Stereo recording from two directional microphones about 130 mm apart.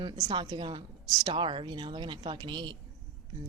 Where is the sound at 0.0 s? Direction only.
35° right (ahead or behind).